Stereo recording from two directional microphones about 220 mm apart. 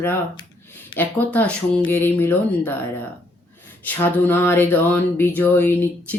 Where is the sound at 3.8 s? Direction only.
10° left (ahead or behind).